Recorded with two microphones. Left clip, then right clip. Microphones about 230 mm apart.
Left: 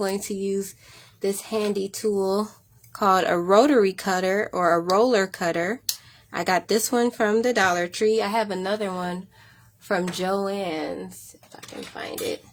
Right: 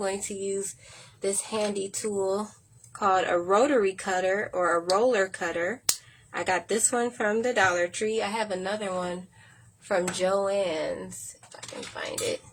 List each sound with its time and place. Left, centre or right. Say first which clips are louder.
0.0 s speech: left 4 dB; left